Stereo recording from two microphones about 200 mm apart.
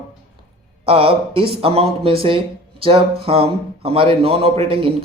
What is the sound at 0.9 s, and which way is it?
A man's voice, 25° right (ahead or behind).